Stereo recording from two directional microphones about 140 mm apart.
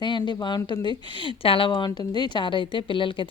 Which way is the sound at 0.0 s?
35° left (ahead or behind).